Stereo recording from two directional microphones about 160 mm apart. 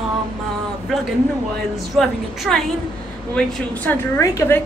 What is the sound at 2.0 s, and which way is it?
A woman's voice, centre (ahead or behind).